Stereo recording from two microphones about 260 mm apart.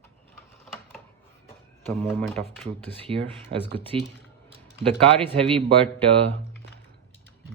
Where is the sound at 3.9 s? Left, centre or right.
Right.